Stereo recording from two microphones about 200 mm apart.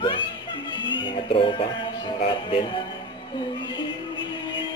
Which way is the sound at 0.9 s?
25° left (ahead or behind).